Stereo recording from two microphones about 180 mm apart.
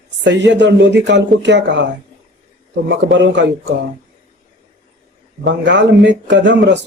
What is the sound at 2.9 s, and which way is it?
Speech, 80° right.